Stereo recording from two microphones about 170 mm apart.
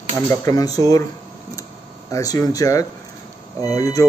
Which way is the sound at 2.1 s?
20° left (ahead or behind).